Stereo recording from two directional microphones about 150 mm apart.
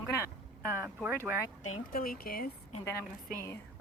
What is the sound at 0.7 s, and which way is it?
Speech, 15° right (ahead or behind).